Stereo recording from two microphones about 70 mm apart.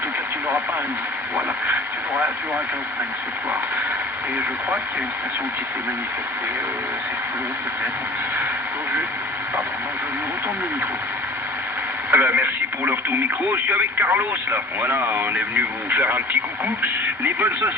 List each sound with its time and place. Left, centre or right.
1.4 s speech: right
12.1 s speech: right